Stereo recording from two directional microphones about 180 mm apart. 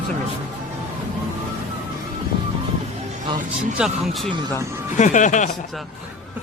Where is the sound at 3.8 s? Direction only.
Centre (ahead or behind).